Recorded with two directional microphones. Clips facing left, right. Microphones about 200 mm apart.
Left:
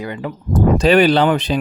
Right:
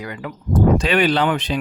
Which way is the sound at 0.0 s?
25° left (ahead or behind).